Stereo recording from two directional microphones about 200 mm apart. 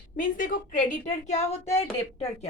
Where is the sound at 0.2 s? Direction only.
40° left (ahead or behind).